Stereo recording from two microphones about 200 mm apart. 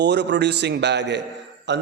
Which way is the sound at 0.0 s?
55° right (ahead or behind).